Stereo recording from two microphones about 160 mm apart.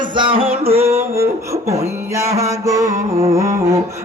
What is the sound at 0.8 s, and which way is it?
Music, 15° right (ahead or behind).